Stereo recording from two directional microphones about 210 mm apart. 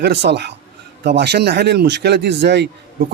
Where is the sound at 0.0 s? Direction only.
55° right (ahead or behind).